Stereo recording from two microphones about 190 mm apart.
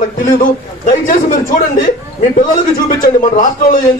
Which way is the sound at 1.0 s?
45° left (ahead or behind).